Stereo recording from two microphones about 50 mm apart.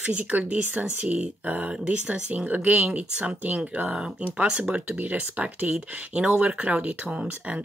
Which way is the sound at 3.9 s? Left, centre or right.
Centre.